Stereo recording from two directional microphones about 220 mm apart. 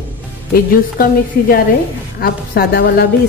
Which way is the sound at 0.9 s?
40° left (ahead or behind).